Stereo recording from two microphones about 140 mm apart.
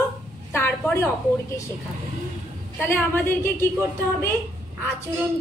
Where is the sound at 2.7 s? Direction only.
15° left (ahead or behind).